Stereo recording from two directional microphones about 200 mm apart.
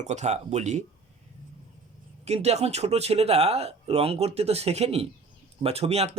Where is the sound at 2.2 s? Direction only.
30° right (ahead or behind).